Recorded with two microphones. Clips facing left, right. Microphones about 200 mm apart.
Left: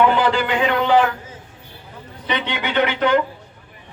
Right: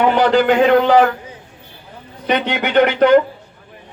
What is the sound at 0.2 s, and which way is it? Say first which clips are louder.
Speech: right 7 dB; 45° right (ahead or behind).